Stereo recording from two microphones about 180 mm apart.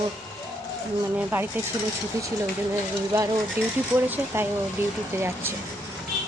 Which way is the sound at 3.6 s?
15° right (ahead or behind).